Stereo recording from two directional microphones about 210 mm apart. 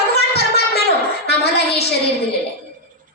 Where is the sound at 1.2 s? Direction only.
50° left (ahead or behind).